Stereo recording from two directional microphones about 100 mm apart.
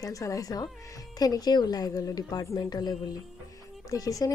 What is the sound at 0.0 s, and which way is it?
A woman's voice, 35° left (ahead or behind).